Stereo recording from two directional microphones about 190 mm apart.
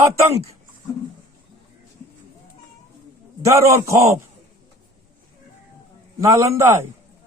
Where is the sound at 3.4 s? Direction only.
15° right (ahead or behind).